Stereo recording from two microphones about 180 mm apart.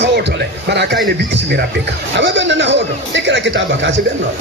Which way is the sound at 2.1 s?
80° right.